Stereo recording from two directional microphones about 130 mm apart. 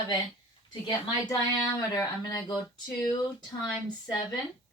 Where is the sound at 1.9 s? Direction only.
30° left (ahead or behind).